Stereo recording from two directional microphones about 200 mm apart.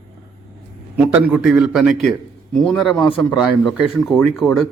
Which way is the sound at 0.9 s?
10° right (ahead or behind).